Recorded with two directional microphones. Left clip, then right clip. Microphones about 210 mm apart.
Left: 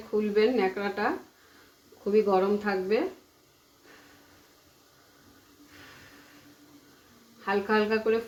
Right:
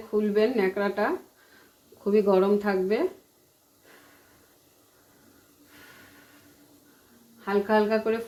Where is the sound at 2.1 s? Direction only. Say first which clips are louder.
Right 2 dB; 35° right (ahead or behind).